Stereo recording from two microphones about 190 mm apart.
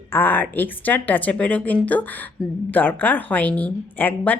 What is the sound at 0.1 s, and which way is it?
Speech, 10° left (ahead or behind).